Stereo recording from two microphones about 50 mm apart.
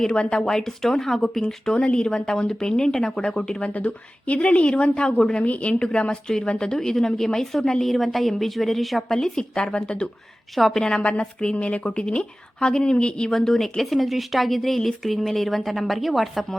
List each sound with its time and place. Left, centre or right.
0.0 s a woman's voice: centre
1.7 s a woman's voice: left
3.8 s a woman's voice: left
10.5 s speech: centre
10.8 s a woman's voice: centre
13.3 s speech: centre